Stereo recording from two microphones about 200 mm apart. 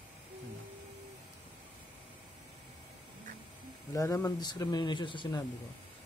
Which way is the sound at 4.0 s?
15° left (ahead or behind).